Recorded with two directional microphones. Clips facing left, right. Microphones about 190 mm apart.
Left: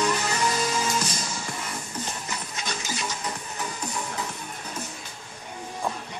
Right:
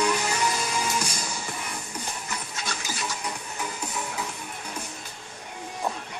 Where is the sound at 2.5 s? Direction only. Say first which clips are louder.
Left 1 dB; 20° left (ahead or behind).